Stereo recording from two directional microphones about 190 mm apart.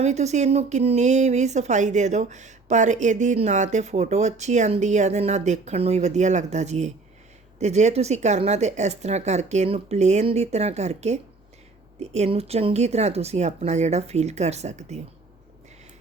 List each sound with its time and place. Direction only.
0.0 s speech: 35° right (ahead or behind)